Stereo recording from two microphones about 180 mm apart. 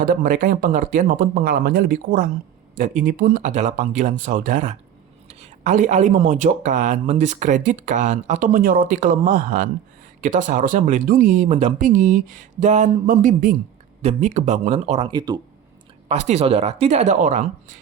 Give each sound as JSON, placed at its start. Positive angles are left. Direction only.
{"t": 0.0, "sound": "speech", "side_deg": -50}
{"t": 3.4, "sound": "speech", "side_deg": -40}
{"t": 15.1, "sound": "speech", "side_deg": -25}
{"t": 16.0, "sound": "speech", "side_deg": -40}